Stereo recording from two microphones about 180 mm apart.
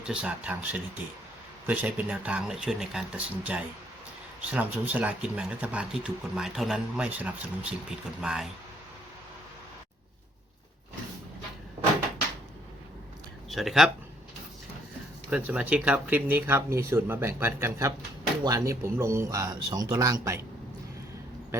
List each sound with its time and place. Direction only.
0.1 s speech: 5° right (ahead or behind)
13.5 s speech: centre (ahead or behind)
15.3 s speech: 10° right (ahead or behind)